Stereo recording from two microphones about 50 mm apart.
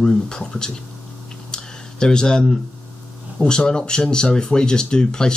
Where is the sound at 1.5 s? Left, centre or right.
Centre.